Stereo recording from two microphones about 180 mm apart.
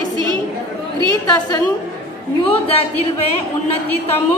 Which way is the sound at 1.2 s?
20° left (ahead or behind).